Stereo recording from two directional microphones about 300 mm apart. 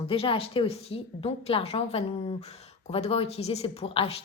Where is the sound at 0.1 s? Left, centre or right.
Centre.